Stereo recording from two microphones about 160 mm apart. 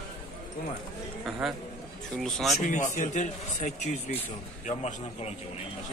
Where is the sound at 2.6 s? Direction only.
50° left (ahead or behind).